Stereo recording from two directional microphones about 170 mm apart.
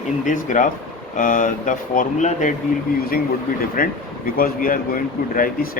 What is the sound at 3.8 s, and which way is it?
Speech, 55° left (ahead or behind).